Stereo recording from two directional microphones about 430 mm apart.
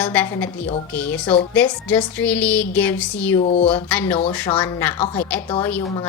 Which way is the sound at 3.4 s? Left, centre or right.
Centre.